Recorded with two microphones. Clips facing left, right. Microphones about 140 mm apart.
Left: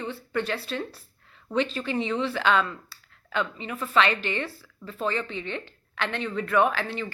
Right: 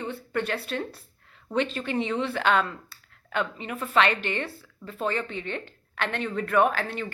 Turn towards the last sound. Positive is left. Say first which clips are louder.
# even
turn(degrees=-50)  # may be behind; listen again after turning